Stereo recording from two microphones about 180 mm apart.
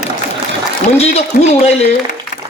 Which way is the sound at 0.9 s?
35° left (ahead or behind).